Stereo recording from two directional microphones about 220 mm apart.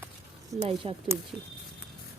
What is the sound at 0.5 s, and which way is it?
Speech, 15° right (ahead or behind).